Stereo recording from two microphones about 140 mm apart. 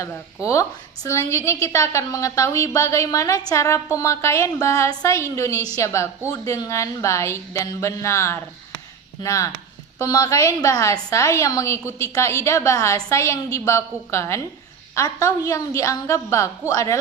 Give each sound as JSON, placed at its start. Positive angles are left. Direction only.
{"t": 0.4, "sound": "a woman's voice", "side_deg": 20}